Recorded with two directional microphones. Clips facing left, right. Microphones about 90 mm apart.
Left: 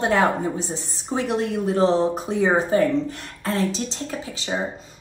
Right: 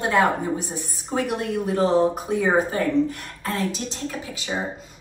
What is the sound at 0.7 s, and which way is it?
Speech, 25° left (ahead or behind).